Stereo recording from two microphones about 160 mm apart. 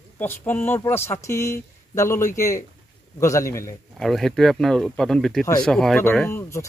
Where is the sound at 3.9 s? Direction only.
Centre (ahead or behind).